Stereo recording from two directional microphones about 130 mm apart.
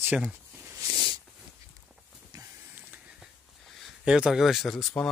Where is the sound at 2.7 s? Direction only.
10° right (ahead or behind).